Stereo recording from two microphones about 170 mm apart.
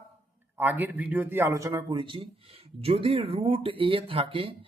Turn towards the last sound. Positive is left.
turn(degrees=-30)  # may be behind; listen again after turning